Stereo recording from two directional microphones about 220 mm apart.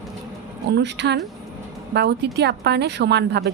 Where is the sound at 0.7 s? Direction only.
50° right (ahead or behind).